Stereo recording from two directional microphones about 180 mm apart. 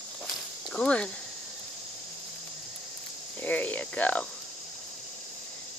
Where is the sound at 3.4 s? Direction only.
10° left (ahead or behind).